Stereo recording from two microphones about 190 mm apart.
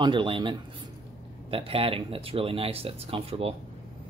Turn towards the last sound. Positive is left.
turn(degrees=-30)  # may be behind; listen again after turning